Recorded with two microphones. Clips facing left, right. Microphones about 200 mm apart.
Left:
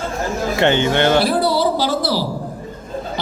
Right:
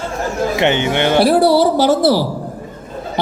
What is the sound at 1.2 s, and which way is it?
Speech, 70° right (ahead or behind).